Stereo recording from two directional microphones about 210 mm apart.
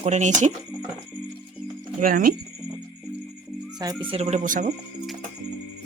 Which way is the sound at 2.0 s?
40° right (ahead or behind).